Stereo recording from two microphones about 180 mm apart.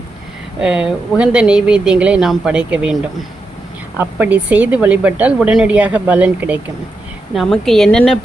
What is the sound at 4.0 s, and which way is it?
A woman's voice, 10° right (ahead or behind).